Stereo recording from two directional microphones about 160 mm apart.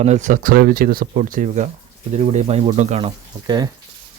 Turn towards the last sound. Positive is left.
turn(degrees=-30)  # may be behind; listen again after turning